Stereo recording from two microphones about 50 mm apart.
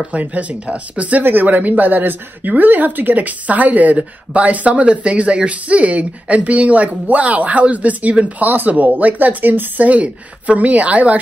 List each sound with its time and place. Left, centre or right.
0.1 s speech: right